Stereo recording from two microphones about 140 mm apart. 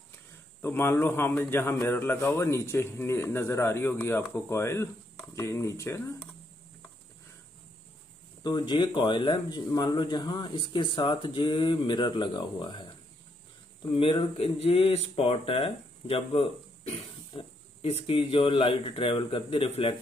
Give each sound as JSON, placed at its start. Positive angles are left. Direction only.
{"t": 0.6, "sound": "speech", "side_deg": 15}
{"t": 8.5, "sound": "speech", "side_deg": 35}
{"t": 14.4, "sound": "speech", "side_deg": 45}